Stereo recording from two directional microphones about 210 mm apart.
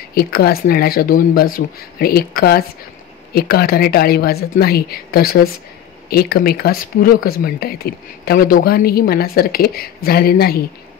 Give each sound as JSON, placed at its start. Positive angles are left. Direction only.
{"t": 0.1, "sound": "speech", "side_deg": 50}